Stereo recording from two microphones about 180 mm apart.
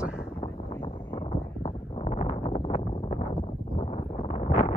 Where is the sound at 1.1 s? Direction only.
35° left (ahead or behind).